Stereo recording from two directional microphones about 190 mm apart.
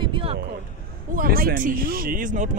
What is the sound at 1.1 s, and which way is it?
Speech, 50° right (ahead or behind).